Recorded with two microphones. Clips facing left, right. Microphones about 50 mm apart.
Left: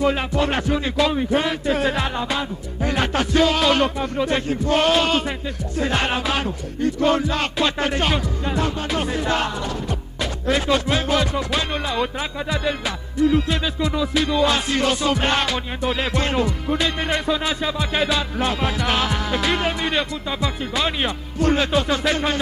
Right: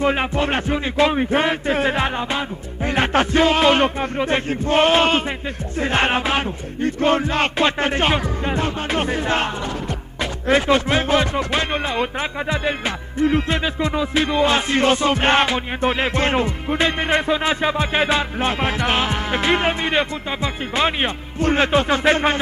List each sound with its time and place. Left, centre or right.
0.0 s music: right